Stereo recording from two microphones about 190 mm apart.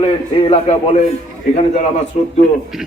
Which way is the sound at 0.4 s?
30° left (ahead or behind).